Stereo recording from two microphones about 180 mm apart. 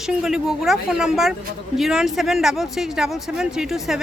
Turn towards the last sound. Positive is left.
turn(degrees=0)  # may be behind; listen again after turning